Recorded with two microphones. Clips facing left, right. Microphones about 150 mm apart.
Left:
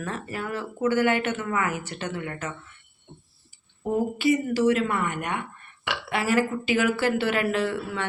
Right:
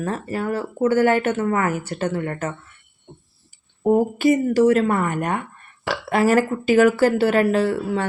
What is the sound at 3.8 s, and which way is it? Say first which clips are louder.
Speech: right 7 dB; 45° right (ahead or behind).